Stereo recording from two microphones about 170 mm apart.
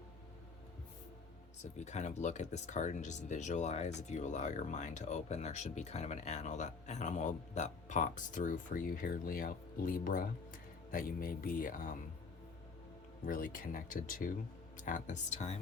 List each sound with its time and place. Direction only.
1.7 s speech: 45° left (ahead or behind)
13.2 s speech: 55° left (ahead or behind)